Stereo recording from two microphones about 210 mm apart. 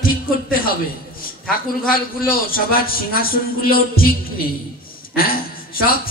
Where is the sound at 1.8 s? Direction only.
45° left (ahead or behind).